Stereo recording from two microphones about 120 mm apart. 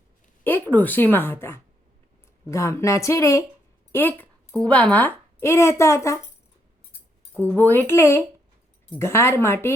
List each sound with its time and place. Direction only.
0.4 s a woman's voice: 15° left (ahead or behind)
7.3 s a woman's voice: 15° left (ahead or behind)